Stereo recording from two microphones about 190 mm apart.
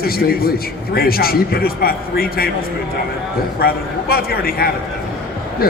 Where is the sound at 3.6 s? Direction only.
55° left (ahead or behind).